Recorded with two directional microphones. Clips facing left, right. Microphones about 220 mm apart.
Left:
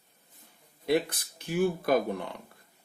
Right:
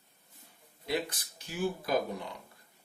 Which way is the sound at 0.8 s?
55° left (ahead or behind).